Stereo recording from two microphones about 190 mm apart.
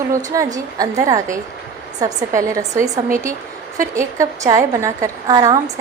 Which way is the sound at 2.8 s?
45° right (ahead or behind).